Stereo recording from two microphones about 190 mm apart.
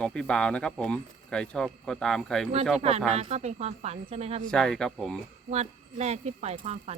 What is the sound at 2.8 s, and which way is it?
Speech, 35° right (ahead or behind).